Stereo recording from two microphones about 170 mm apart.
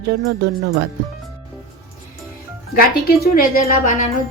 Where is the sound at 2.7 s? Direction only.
65° left (ahead or behind).